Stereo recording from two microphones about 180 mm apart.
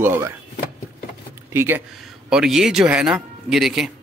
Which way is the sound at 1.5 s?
15° right (ahead or behind).